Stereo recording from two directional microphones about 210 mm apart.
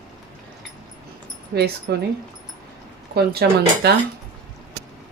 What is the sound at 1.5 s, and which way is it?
Speech, 50° right (ahead or behind).